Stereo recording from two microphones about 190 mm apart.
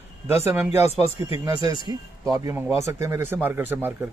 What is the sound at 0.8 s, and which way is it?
Speech, 30° left (ahead or behind).